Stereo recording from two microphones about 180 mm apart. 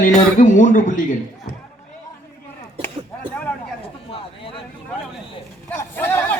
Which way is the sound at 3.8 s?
30° left (ahead or behind).